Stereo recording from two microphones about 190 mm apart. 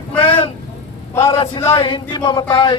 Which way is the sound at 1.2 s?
25° left (ahead or behind).